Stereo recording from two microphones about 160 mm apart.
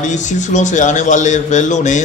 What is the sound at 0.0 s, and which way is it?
A man's voice, 50° left (ahead or behind).